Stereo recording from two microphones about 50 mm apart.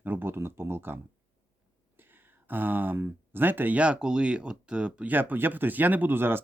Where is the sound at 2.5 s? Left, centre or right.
Right.